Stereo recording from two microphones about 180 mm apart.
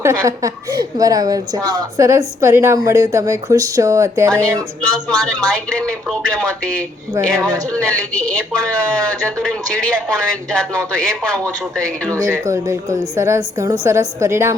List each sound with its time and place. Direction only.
0.0 s a woman's voice: 15° right (ahead or behind)
4.9 s a woman's voice: 5° left (ahead or behind)
12.2 s a woman's voice: 15° right (ahead or behind)